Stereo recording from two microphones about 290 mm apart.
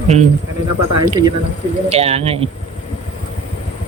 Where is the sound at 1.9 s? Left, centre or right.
Right.